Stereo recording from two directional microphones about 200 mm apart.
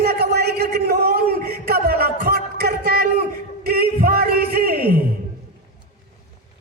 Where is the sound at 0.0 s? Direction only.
50° right (ahead or behind).